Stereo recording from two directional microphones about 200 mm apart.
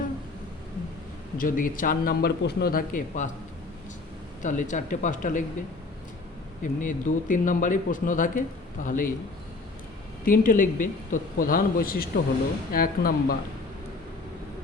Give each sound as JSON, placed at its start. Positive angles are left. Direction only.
{"t": 1.4, "sound": "speech", "side_deg": 45}
{"t": 4.4, "sound": "speech", "side_deg": 40}
{"t": 6.6, "sound": "speech", "side_deg": 40}
{"t": 10.2, "sound": "speech", "side_deg": 45}